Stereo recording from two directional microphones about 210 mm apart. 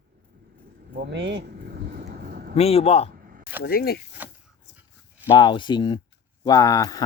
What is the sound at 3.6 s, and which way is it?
Speech, 45° left (ahead or behind).